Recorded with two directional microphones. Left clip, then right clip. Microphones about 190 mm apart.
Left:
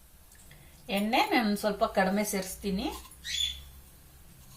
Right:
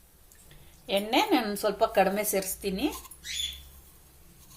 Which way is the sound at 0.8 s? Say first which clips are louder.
Right 2 dB; 40° right (ahead or behind).